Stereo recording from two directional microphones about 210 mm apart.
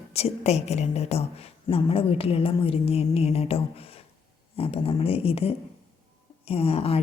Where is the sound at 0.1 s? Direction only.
30° left (ahead or behind).